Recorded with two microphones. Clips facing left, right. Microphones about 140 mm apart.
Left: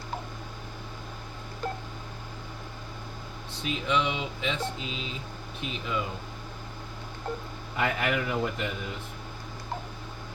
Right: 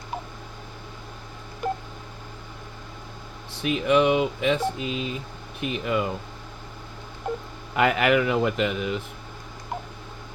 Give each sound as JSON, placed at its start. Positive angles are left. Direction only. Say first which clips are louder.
{"t": 1.6, "sound": "telephone dialing", "louder": "right 6 dB", "side_deg": -15}
{"t": 3.6, "sound": "speech", "louder": "right 8 dB", "side_deg": -60}
{"t": 7.3, "sound": "speech", "louder": "right 5 dB", "side_deg": -20}
{"t": 7.8, "sound": "a man's voice", "louder": "right 8 dB", "side_deg": -80}